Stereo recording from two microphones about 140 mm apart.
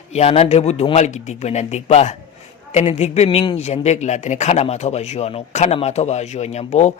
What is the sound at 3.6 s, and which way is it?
Speech, 50° left (ahead or behind).